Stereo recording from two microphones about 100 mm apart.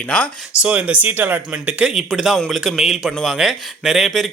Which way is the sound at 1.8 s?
5° right (ahead or behind).